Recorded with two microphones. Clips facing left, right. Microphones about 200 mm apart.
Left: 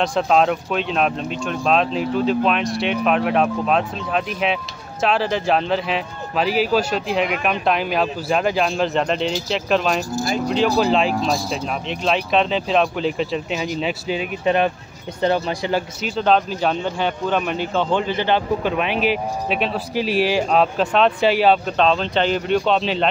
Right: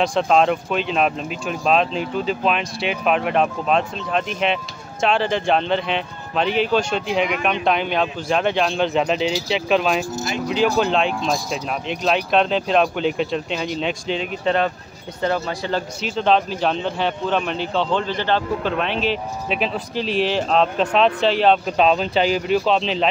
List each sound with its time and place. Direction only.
0.0 s a man's voice: centre (ahead or behind)
16.0 s a man's voice: centre (ahead or behind)
21.6 s a man's voice: 5° right (ahead or behind)